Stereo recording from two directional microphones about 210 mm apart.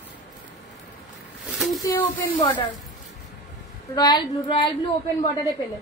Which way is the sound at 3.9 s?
20° left (ahead or behind).